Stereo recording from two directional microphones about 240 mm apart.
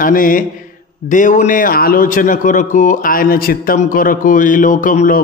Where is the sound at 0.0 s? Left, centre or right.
Left.